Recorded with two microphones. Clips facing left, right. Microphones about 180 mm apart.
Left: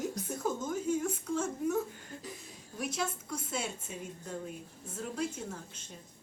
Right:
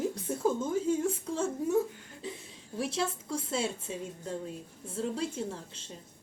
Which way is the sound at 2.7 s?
30° right (ahead or behind).